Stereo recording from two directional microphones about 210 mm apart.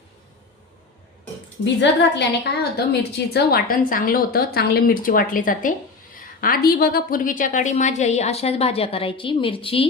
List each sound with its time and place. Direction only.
1.6 s a woman's voice: 55° left (ahead or behind); by 9.9 s 25° left (ahead or behind)